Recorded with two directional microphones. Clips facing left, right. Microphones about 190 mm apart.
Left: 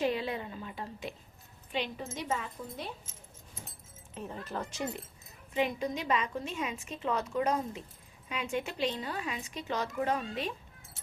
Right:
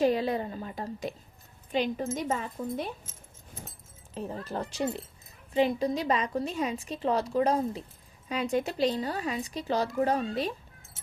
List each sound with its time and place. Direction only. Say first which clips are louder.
0.0 s a woman's voice: right 6 dB; 40° right (ahead or behind)
4.1 s a woman's voice: right 4 dB; 35° right (ahead or behind)